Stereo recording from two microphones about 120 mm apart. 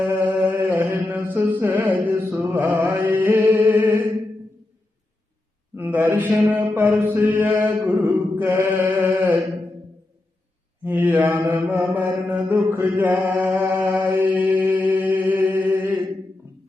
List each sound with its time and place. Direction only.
0.1 s chant: 15° right (ahead or behind)
1.5 s music: 15° right (ahead or behind)
5.7 s a man's voice: 20° right (ahead or behind)
6.5 s mantra: 15° right (ahead or behind)
10.8 s mantra: 15° right (ahead or behind)